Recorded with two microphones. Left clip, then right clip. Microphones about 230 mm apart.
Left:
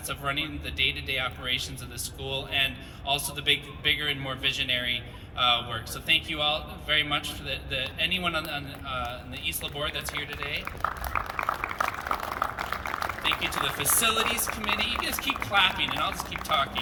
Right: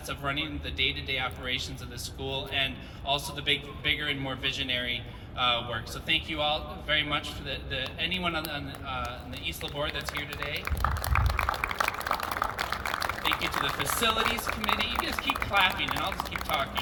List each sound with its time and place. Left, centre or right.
0.1 s a man's voice: left
11.3 s liquid: right
13.2 s a man's voice: left